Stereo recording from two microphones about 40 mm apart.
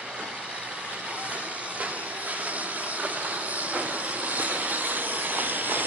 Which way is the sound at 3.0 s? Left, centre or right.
Right.